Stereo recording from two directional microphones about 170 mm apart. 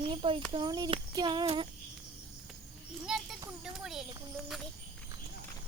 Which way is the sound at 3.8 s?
Centre (ahead or behind).